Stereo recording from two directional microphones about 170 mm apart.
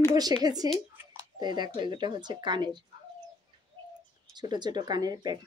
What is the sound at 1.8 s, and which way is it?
Speech, 25° right (ahead or behind).